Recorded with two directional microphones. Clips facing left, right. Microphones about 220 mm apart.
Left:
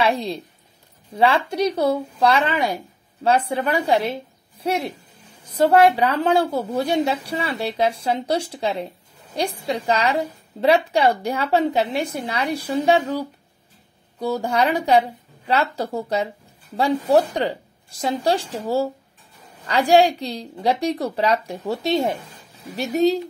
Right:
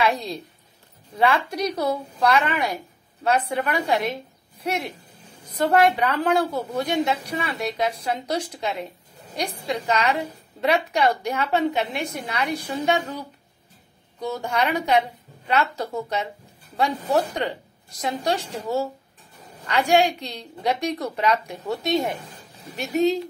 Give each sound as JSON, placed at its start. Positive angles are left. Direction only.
{"t": 0.0, "sound": "a woman's voice", "side_deg": 25}
{"t": 14.2, "sound": "a woman's voice", "side_deg": 35}